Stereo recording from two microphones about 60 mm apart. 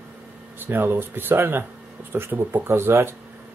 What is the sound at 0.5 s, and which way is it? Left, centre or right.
Speech, right.